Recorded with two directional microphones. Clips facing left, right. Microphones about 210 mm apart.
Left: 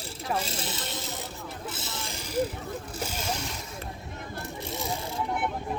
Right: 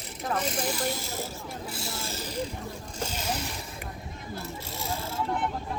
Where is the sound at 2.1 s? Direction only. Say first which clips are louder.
Left 6 dB; 10° left (ahead or behind).